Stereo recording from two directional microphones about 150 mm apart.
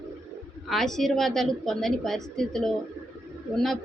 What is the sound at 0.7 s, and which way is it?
Speech, centre (ahead or behind).